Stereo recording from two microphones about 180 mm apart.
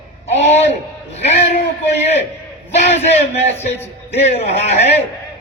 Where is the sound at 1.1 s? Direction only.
35° left (ahead or behind).